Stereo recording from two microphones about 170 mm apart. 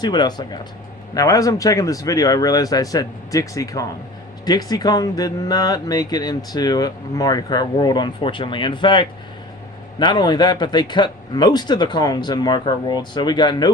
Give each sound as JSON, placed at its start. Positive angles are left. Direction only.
{"t": 0.0, "sound": "speech", "side_deg": 25}